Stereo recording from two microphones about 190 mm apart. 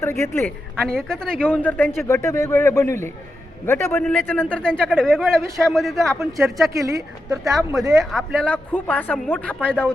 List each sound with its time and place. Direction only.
0.0 s a man's voice: 15° left (ahead or behind)
6.1 s speech: 15° right (ahead or behind)
7.9 s a man's voice: centre (ahead or behind)